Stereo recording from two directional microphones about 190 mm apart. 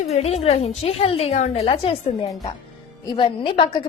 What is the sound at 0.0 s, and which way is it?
A woman's voice, 35° left (ahead or behind).